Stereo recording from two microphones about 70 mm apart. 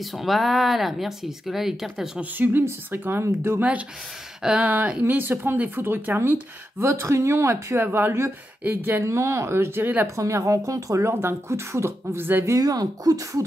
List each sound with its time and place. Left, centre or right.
0.0 s speech: centre
2.3 s speech: right
4.4 s speech: centre
5.0 s speech: right
6.8 s speech: right
8.6 s speech: right
9.0 s speech: right
10.1 s speech: right
12.5 s speech: right